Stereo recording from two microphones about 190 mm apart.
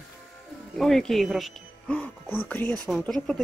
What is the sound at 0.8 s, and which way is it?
Speech, centre (ahead or behind).